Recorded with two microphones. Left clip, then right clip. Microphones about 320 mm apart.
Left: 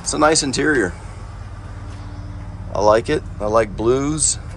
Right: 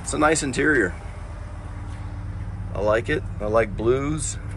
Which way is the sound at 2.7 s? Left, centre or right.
Centre.